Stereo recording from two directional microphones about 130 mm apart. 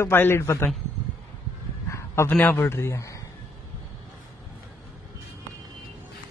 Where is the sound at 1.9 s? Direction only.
20° left (ahead or behind).